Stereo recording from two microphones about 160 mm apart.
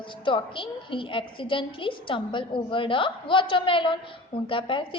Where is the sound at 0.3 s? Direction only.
30° left (ahead or behind).